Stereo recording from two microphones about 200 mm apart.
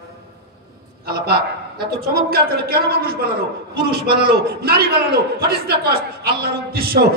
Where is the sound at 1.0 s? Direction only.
50° right (ahead or behind).